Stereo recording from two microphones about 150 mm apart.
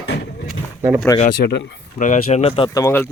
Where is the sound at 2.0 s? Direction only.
50° left (ahead or behind).